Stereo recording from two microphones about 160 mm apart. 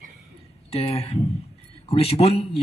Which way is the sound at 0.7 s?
40° left (ahead or behind).